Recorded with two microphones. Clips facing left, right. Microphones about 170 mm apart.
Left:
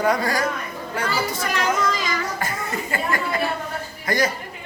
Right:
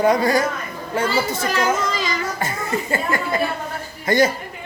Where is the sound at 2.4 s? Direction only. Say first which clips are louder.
Right 3 dB; 25° right (ahead or behind).